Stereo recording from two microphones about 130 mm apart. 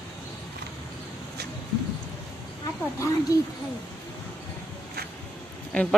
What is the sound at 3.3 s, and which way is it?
Speech, 25° left (ahead or behind).